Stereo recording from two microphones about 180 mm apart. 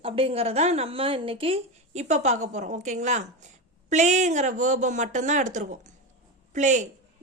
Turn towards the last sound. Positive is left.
turn(degrees=-40)  # may be behind; listen again after turning